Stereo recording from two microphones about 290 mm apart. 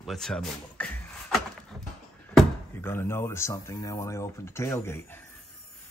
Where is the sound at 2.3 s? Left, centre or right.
Centre.